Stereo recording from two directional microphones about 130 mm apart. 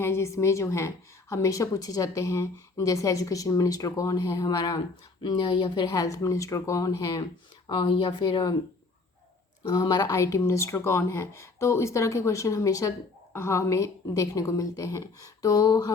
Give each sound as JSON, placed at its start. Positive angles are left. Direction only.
{"t": 0.0, "sound": "a woman's voice", "side_deg": 20}
{"t": 7.7, "sound": "speech", "side_deg": 40}
{"t": 9.6, "sound": "a woman's voice", "side_deg": 30}